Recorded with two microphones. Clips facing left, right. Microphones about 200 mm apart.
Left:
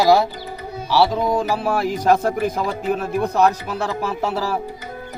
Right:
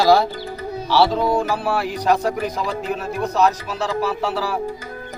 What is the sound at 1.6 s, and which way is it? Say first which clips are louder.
Speech: left 2 dB; 45° left (ahead or behind).